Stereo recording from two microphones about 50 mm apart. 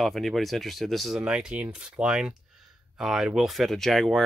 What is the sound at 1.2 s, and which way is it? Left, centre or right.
Speech, right.